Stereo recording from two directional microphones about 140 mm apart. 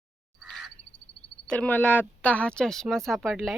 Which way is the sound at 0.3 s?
Centre (ahead or behind).